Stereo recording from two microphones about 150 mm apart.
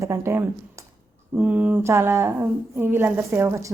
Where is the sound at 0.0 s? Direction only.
15° right (ahead or behind).